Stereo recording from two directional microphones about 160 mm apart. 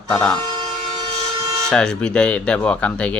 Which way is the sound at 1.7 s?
5° left (ahead or behind).